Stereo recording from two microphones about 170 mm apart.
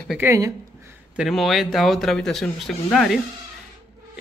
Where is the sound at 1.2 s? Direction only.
Centre (ahead or behind).